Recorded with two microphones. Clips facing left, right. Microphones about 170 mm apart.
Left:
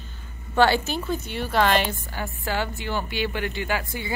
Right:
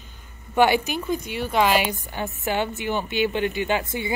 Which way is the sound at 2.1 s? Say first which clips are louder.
Right 3 dB; 20° right (ahead or behind).